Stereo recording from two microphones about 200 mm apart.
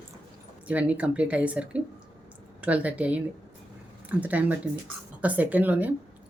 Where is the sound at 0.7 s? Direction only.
5° right (ahead or behind).